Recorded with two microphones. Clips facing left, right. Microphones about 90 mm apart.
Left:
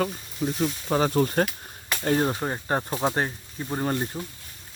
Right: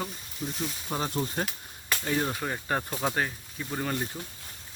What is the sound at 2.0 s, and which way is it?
Speech, 50° left (ahead or behind).